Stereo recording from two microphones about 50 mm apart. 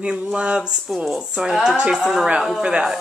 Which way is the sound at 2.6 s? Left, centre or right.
Centre.